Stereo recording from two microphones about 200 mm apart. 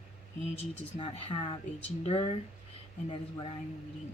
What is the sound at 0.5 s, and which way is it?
Speech, 25° left (ahead or behind).